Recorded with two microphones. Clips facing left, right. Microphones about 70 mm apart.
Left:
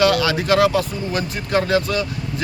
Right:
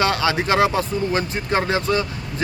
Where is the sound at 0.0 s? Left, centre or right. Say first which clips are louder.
Left 2 dB; right.